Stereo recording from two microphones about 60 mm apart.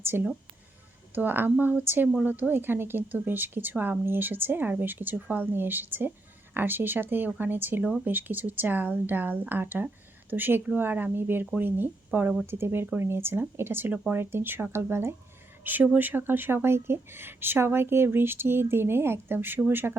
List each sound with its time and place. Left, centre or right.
0.0 s a woman's voice: right
15.6 s a woman's voice: right